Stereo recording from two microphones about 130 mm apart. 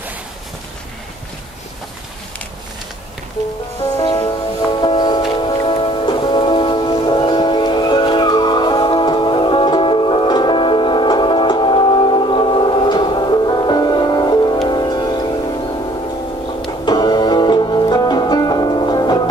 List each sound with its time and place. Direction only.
4.0 s music: 35° left (ahead or behind)
16.6 s music: 35° left (ahead or behind)